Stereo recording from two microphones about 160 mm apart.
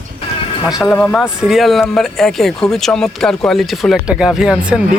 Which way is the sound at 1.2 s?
5° right (ahead or behind).